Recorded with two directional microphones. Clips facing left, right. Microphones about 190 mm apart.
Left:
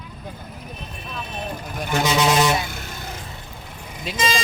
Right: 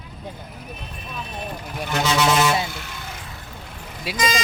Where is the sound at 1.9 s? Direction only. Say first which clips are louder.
Left 1 dB; 15° left (ahead or behind).